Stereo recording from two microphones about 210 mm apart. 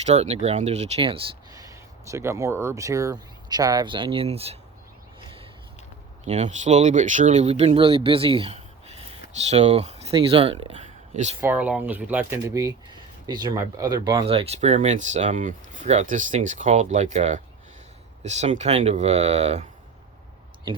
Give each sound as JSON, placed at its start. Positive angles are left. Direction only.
{"t": 0.0, "sound": "speech", "side_deg": -30}
{"t": 6.2, "sound": "speech", "side_deg": -35}
{"t": 11.3, "sound": "speech", "side_deg": -10}